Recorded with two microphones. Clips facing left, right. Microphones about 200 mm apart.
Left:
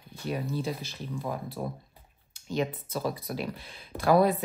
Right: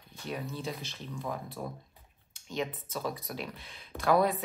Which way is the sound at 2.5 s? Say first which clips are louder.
Left 5 dB; 5° left (ahead or behind).